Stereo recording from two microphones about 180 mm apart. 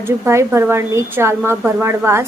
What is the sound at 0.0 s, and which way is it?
A woman's voice, 15° right (ahead or behind).